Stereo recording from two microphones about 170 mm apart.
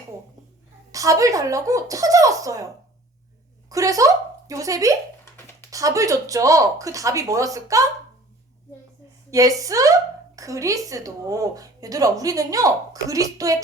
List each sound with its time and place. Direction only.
0.9 s speech: 20° right (ahead or behind)
3.7 s speech: 20° right (ahead or behind)
9.3 s speech: 20° right (ahead or behind)